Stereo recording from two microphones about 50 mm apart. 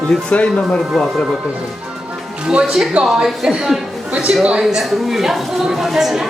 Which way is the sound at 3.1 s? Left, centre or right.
Centre.